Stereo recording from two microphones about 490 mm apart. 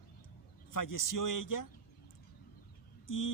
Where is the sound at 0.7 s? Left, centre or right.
Left.